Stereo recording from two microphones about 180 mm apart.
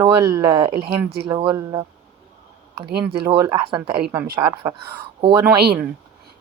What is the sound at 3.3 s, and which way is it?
Speech, 20° right (ahead or behind).